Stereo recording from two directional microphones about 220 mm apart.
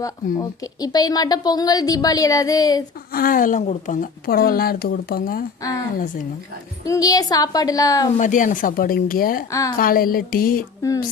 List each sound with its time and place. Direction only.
0.0 s speech: 15° left (ahead or behind)
3.1 s a woman's voice: 40° left (ahead or behind)
6.8 s speech: 15° left (ahead or behind)
8.2 s a woman's voice: 35° left (ahead or behind)
9.5 s speech: 15° left (ahead or behind)
9.7 s a woman's voice: 40° left (ahead or behind)